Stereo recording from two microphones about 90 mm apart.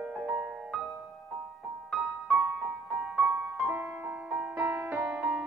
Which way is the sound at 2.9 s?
15° right (ahead or behind).